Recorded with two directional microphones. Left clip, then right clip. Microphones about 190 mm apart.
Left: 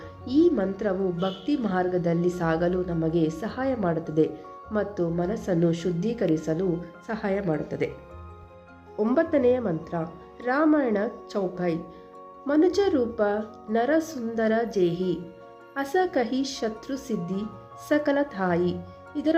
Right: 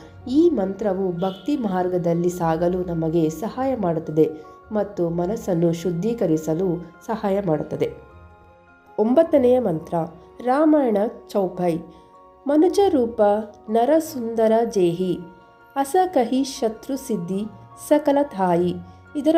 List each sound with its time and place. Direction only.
0.3 s a woman's voice: 10° right (ahead or behind)
9.0 s a woman's voice: 15° right (ahead or behind)